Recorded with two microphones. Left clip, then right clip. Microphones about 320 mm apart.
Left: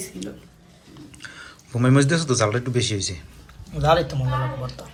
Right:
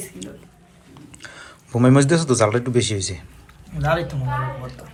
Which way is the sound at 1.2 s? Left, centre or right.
Centre.